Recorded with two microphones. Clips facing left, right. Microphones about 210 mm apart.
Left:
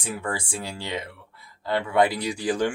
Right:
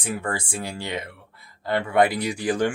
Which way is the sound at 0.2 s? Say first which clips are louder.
Right 1 dB; 50° right (ahead or behind).